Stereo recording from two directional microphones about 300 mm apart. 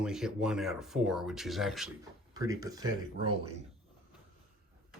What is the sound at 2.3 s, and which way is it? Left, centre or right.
Speech, centre.